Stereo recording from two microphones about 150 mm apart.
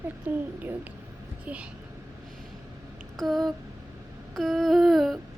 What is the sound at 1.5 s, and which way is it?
Speech, 10° right (ahead or behind).